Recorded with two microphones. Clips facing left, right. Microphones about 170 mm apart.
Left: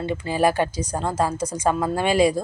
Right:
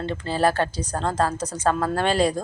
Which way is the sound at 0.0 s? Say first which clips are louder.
Left 1 dB; 10° left (ahead or behind).